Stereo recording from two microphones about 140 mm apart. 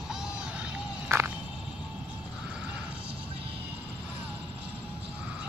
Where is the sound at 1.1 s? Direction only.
20° right (ahead or behind).